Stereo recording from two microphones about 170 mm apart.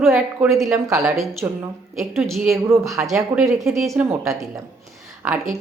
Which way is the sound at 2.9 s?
Centre (ahead or behind).